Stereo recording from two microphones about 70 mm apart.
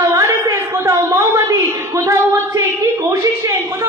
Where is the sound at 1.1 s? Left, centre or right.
Right.